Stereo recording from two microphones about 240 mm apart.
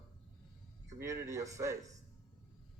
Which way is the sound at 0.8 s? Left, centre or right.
Centre.